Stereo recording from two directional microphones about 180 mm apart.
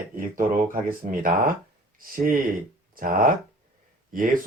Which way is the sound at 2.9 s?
50° right (ahead or behind).